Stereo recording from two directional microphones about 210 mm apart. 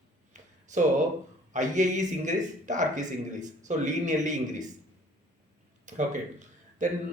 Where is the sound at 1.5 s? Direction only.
35° right (ahead or behind).